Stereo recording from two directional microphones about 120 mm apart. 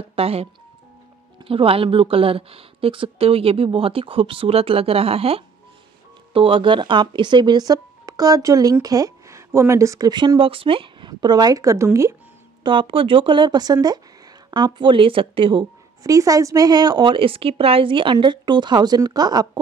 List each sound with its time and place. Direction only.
0.1 s a woman's voice: 55° right (ahead or behind); by 12.2 s 25° right (ahead or behind)
12.6 s speech: 45° right (ahead or behind)
16.0 s a woman's voice: 30° right (ahead or behind)